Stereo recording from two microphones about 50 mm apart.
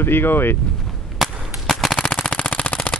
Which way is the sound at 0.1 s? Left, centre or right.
Left.